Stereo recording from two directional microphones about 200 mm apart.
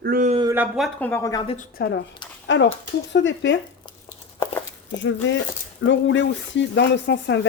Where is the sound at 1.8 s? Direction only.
55° left (ahead or behind).